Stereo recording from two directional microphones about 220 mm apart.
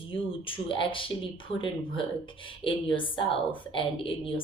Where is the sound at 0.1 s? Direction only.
25° left (ahead or behind).